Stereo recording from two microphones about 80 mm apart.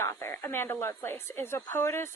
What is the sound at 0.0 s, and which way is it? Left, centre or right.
Speech, left.